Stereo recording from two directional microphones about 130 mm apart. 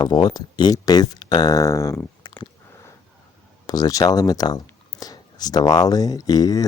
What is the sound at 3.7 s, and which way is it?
Speech, 30° left (ahead or behind).